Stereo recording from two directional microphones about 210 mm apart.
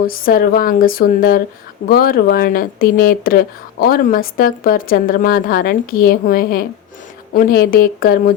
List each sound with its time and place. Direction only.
0.1 s speech: 45° left (ahead or behind)